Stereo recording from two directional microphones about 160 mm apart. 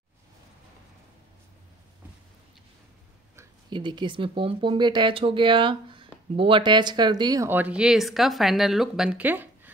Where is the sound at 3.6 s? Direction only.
30° right (ahead or behind).